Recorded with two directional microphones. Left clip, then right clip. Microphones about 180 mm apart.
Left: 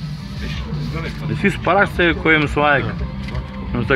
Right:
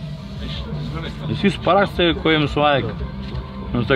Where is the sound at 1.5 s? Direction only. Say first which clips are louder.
Left 1 dB; 30° right (ahead or behind).